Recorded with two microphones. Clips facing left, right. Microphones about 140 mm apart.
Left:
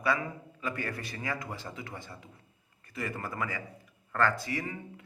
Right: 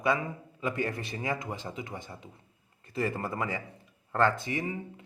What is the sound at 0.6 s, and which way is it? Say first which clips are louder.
A man's voice: right 4 dB; 20° right (ahead or behind).